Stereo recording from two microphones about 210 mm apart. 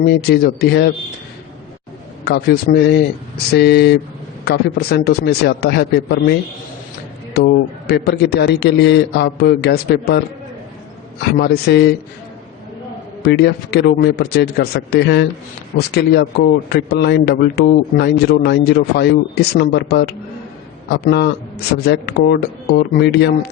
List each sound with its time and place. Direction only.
0.0 s a man's voice: 50° left (ahead or behind)
2.2 s a man's voice: 50° left (ahead or behind)
7.3 s a man's voice: 50° left (ahead or behind)
11.2 s a man's voice: 50° left (ahead or behind)
13.2 s a man's voice: 50° left (ahead or behind)